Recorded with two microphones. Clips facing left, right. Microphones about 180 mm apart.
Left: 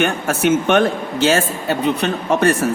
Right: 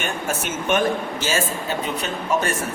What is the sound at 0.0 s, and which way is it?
A man's voice, 65° left (ahead or behind).